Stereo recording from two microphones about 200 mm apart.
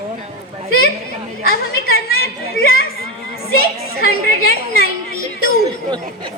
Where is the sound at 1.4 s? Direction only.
50° left (ahead or behind).